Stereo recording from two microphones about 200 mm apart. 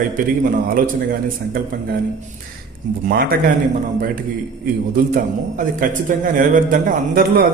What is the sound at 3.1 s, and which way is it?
Speech, 50° right (ahead or behind).